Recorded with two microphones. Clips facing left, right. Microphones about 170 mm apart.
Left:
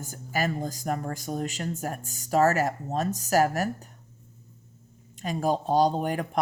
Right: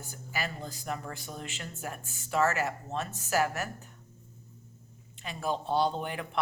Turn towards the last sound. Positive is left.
turn(degrees=40)  # may be behind; listen again after turning